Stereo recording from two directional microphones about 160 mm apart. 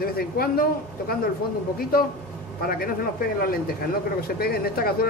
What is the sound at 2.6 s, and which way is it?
Speech, 65° left (ahead or behind).